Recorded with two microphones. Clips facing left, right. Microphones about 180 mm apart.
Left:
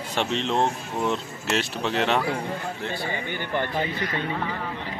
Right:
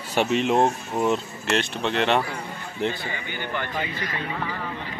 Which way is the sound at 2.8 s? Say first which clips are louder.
Right 4 dB; 20° right (ahead or behind).